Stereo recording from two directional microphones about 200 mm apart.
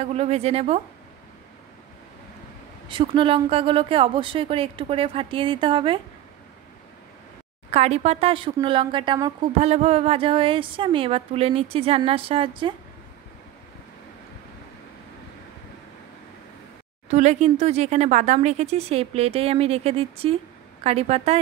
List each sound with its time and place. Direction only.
0.0 s speech: 30° right (ahead or behind)
2.9 s speech: 25° right (ahead or behind)
7.7 s speech: 30° right (ahead or behind)
17.1 s speech: 35° right (ahead or behind)